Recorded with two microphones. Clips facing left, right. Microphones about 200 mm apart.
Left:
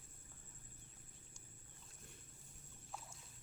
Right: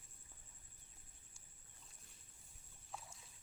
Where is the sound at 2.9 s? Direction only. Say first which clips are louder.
Even; centre (ahead or behind).